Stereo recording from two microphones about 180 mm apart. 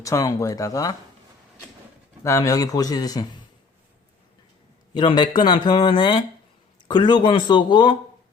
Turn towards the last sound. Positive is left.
turn(degrees=25)  # may be behind; listen again after turning